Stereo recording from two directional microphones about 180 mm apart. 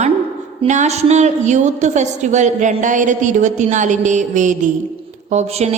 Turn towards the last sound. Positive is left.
turn(degrees=-35)  # may be behind; listen again after turning